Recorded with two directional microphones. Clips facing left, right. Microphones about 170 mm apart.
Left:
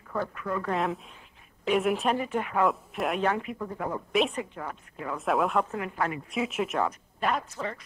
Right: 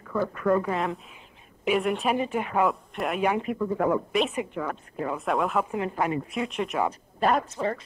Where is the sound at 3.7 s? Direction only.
75° right (ahead or behind).